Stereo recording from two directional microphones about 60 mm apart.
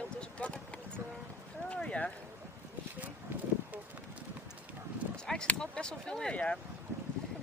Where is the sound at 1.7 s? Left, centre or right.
Left.